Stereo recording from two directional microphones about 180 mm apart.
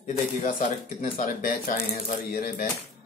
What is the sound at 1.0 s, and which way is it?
Speech, 50° left (ahead or behind).